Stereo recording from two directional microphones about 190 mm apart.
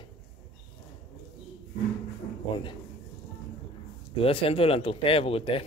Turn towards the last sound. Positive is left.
turn(degrees=30)  # may be behind; listen again after turning